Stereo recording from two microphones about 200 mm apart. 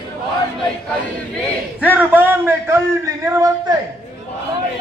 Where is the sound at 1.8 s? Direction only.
10° right (ahead or behind).